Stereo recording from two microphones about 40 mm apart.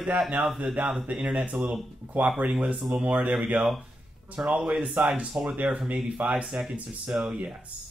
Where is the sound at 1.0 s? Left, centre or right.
Right.